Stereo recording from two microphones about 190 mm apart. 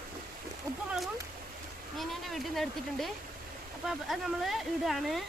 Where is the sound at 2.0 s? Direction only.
Centre (ahead or behind).